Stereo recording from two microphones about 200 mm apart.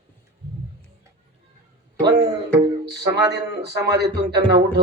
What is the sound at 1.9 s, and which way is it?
A man's voice, 55° right (ahead or behind).